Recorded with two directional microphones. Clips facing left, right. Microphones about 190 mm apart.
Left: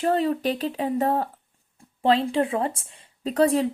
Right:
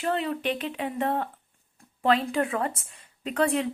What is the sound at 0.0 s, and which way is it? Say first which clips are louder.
A woman's voice: left 5 dB; 40° left (ahead or behind).